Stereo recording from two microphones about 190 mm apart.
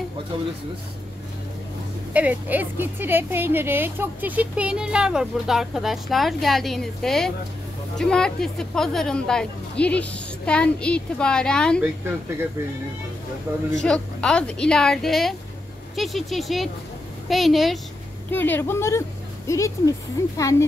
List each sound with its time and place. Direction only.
2.1 s a woman's voice: 10° right (ahead or behind)
13.5 s speech: 15° right (ahead or behind)
13.8 s a woman's voice: 5° left (ahead or behind)
18.3 s speech: 10° left (ahead or behind)